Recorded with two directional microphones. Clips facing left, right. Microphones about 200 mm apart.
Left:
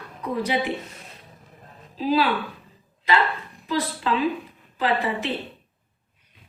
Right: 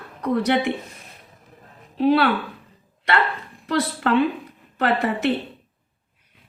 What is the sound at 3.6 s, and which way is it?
A woman's voice, 75° right (ahead or behind).